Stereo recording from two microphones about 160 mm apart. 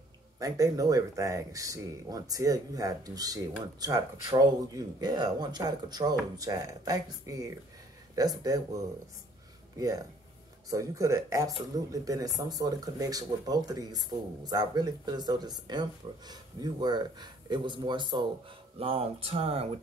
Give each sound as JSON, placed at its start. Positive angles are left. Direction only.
{"t": 0.4, "sound": "speech", "side_deg": -20}